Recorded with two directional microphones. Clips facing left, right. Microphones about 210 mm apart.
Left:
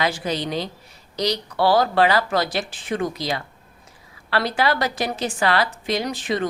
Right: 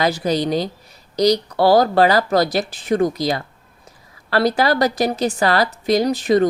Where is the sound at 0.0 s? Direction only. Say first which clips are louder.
Right 5 dB; 40° right (ahead or behind).